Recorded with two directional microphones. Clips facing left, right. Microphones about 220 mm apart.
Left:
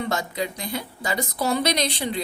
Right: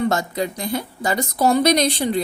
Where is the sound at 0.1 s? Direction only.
45° right (ahead or behind).